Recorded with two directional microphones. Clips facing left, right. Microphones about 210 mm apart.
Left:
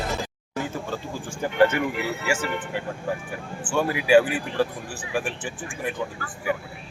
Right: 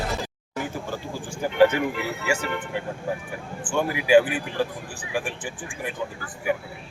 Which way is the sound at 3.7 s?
20° right (ahead or behind).